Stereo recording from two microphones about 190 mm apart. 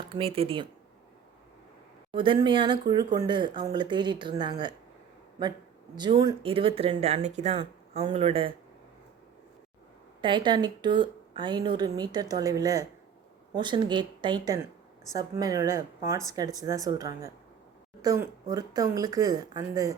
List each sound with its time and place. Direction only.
0.0 s a woman's voice: 25° right (ahead or behind)
2.1 s a woman's voice: 25° right (ahead or behind)
6.0 s a woman's voice: 25° right (ahead or behind)
10.2 s a woman's voice: 25° right (ahead or behind)